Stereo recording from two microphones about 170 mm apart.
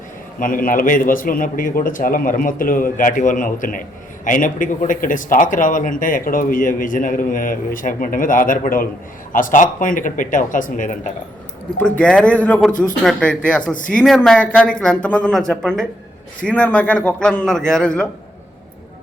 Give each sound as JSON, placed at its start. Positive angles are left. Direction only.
{"t": 0.3, "sound": "a man's voice", "side_deg": 55}
{"t": 11.9, "sound": "a man's voice", "side_deg": 5}